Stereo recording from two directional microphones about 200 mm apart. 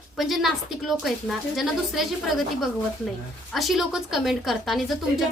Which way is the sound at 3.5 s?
Centre (ahead or behind).